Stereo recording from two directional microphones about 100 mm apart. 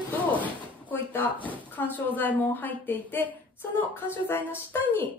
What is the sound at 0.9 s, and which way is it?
A woman's voice, 20° left (ahead or behind).